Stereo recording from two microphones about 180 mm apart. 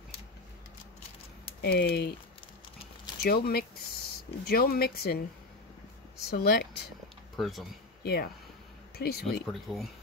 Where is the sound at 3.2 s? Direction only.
60° left (ahead or behind).